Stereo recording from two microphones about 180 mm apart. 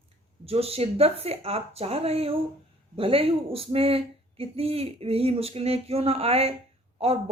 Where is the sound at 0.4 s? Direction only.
35° right (ahead or behind).